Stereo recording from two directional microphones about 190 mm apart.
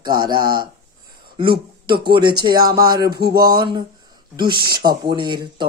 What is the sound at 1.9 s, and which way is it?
Speech, 55° right (ahead or behind).